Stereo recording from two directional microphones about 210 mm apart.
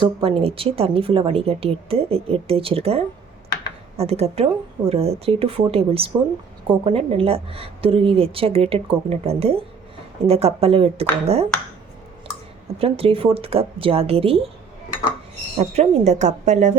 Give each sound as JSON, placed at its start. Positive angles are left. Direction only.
{"t": 0.0, "sound": "a woman's voice", "side_deg": -25}
{"t": 12.8, "sound": "a woman's voice", "side_deg": -25}
{"t": 15.5, "sound": "speech", "side_deg": -30}